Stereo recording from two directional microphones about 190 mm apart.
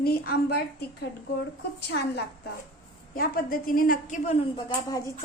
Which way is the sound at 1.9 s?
60° left (ahead or behind).